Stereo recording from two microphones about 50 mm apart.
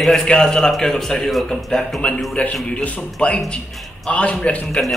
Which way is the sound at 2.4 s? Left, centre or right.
Left.